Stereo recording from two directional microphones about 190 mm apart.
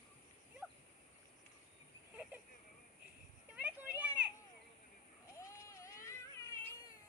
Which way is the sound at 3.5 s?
10° right (ahead or behind).